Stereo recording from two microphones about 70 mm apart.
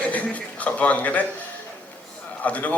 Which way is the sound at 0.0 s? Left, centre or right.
Left.